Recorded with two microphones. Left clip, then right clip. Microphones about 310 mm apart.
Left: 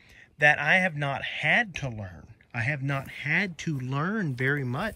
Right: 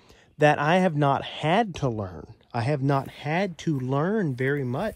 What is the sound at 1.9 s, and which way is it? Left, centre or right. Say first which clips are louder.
Speech: right 10 dB; left.